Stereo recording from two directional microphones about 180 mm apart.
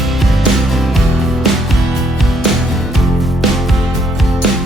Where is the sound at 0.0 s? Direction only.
Centre (ahead or behind).